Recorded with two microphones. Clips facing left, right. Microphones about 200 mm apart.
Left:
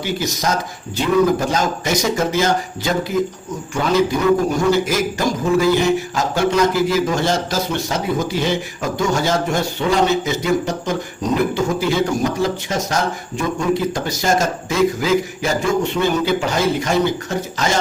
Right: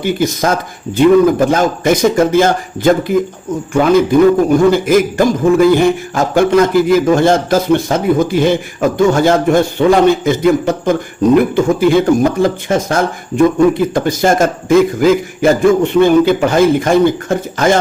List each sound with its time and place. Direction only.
0.0 s a man's voice: 55° right (ahead or behind)